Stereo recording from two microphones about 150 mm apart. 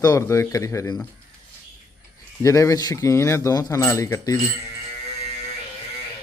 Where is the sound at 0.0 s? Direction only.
20° left (ahead or behind).